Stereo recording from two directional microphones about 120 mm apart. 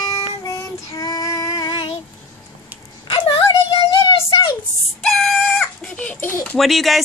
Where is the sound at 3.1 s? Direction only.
50° left (ahead or behind).